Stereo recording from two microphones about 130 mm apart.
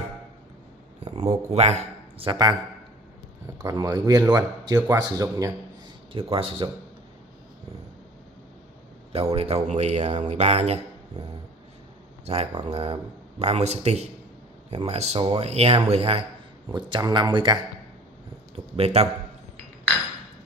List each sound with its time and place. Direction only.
1.0 s speech: 60° right (ahead or behind); by 2.5 s 35° right (ahead or behind)
3.6 s speech: 30° right (ahead or behind)
6.1 s speech: 45° right (ahead or behind)
9.3 s speech: 50° right (ahead or behind)
12.3 s speech: 55° right (ahead or behind)
16.7 s speech: 35° right (ahead or behind)
18.5 s a sound: 50° right (ahead or behind)